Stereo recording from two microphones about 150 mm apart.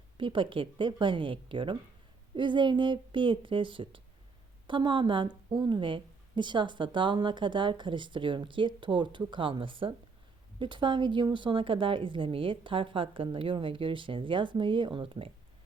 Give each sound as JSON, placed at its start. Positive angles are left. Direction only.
{"t": 0.2, "sound": "a woman's voice", "side_deg": -35}